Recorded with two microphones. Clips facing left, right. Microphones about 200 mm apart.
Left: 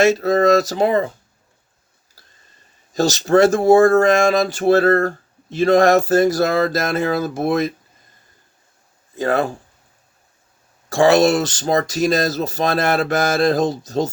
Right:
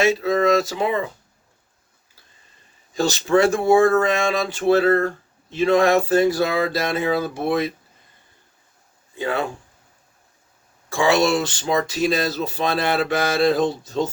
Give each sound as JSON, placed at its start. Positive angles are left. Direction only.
{"t": 0.0, "sound": "speech", "side_deg": 40}
{"t": 2.9, "sound": "speech", "side_deg": 40}
{"t": 9.1, "sound": "speech", "side_deg": 40}
{"t": 10.8, "sound": "speech", "side_deg": 40}